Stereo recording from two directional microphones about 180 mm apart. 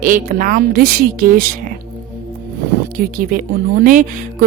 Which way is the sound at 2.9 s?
50° right (ahead or behind).